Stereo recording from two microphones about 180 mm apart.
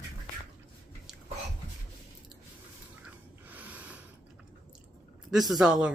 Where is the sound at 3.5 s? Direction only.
10° right (ahead or behind).